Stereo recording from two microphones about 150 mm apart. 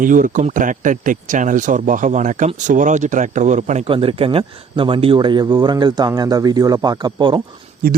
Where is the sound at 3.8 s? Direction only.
35° right (ahead or behind).